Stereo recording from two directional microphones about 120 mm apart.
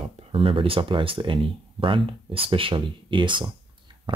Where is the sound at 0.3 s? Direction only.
45° right (ahead or behind).